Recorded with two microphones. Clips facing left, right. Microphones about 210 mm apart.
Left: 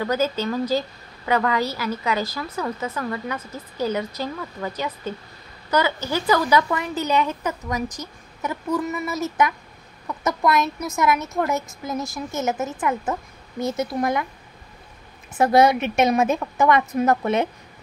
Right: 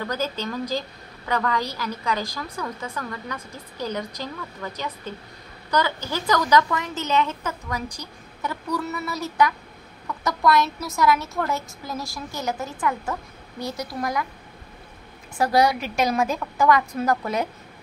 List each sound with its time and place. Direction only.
0.0 s a woman's voice: 10° left (ahead or behind)
5.7 s a woman's voice: 10° left (ahead or behind); by 14.2 s 25° left (ahead or behind)
15.3 s a woman's voice: 20° left (ahead or behind)